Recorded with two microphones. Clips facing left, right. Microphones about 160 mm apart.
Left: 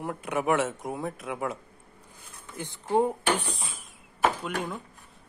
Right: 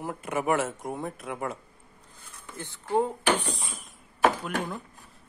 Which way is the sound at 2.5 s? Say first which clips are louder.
Left 1 dB; 15° left (ahead or behind).